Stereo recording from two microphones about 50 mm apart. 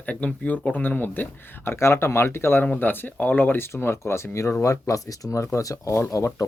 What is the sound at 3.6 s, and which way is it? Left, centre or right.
Speech, left.